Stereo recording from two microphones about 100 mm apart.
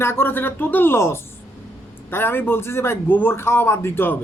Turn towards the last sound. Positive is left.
turn(degrees=25)  # may be behind; listen again after turning